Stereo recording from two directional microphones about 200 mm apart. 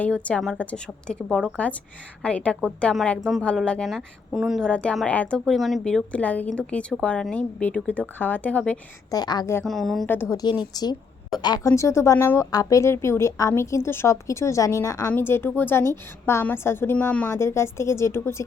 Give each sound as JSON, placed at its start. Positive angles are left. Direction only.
{"t": 0.0, "sound": "a woman's voice", "side_deg": 5}
{"t": 9.0, "sound": "a woman's voice", "side_deg": 20}
{"t": 9.6, "sound": "a woman's voice", "side_deg": 0}
{"t": 10.6, "sound": "a woman's voice", "side_deg": 20}